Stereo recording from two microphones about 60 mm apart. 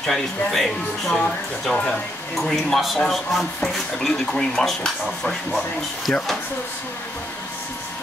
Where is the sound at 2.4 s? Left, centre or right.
Centre.